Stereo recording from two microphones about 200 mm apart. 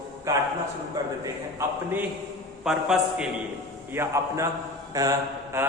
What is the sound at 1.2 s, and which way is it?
Speech, 15° right (ahead or behind).